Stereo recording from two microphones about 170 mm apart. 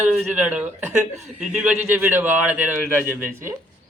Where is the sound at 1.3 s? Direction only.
5° right (ahead or behind).